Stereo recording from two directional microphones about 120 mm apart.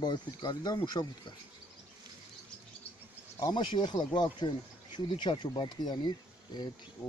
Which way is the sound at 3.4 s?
40° left (ahead or behind).